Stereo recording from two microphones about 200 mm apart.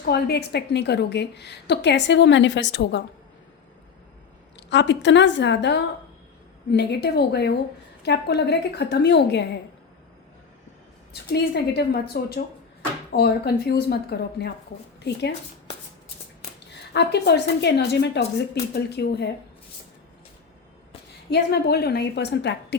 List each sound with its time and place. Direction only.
0.0 s a woman's voice: 55° left (ahead or behind)
4.5 s a woman's voice: 60° left (ahead or behind)
11.1 s speech: 55° left (ahead or behind)
16.9 s a woman's voice: 60° left (ahead or behind)
21.2 s a woman's voice: 55° left (ahead or behind)